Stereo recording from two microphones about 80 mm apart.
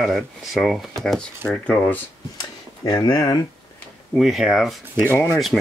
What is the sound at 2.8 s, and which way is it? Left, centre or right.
Speech, left.